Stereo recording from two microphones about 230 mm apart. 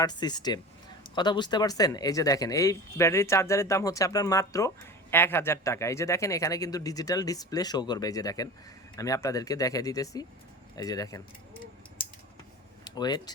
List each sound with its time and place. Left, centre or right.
0.0 s speech: centre
12.8 s speech: centre